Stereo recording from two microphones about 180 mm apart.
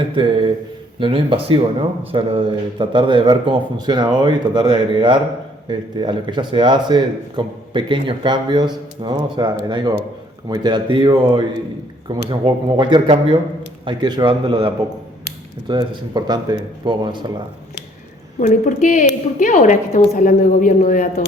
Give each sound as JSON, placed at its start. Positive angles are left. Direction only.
{"t": 0.2, "sound": "speech", "side_deg": -25}
{"t": 18.3, "sound": "a woman's voice", "side_deg": 40}